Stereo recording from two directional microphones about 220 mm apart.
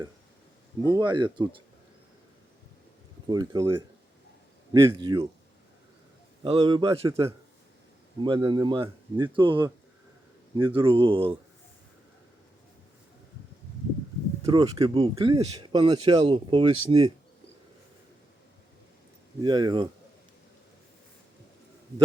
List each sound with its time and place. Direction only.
0.9 s speech: 20° right (ahead or behind)
3.2 s speech: 20° right (ahead or behind)
6.4 s speech: 25° right (ahead or behind)
8.2 s speech: 20° right (ahead or behind)
14.4 s speech: 25° right (ahead or behind)
19.4 s speech: 20° right (ahead or behind)